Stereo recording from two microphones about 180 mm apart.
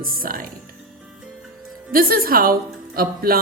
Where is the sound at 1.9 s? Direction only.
55° right (ahead or behind).